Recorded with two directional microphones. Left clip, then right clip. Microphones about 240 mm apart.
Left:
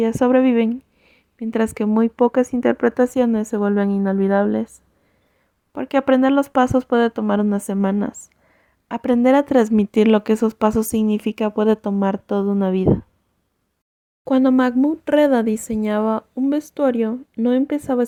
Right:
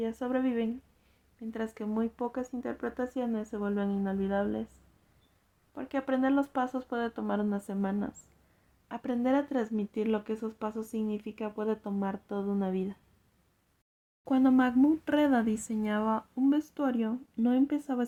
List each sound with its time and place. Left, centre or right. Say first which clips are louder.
0.0 s speech: left 16 dB; left
5.7 s speech: left 15 dB; left
14.3 s speech: left 10 dB; left